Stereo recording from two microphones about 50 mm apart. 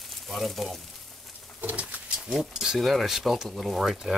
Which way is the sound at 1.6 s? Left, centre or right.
Right.